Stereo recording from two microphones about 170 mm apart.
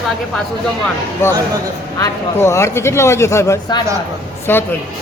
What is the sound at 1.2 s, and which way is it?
Speech, 15° left (ahead or behind).